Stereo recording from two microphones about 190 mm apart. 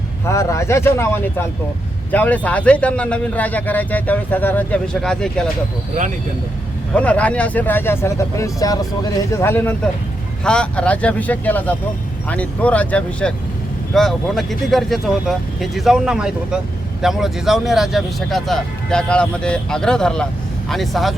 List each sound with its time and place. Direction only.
0.3 s speech: 15° left (ahead or behind)
6.9 s speech: 5° left (ahead or behind)